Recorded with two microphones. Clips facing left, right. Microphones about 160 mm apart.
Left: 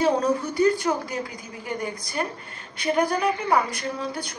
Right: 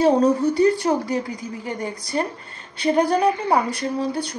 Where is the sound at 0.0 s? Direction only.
30° right (ahead or behind).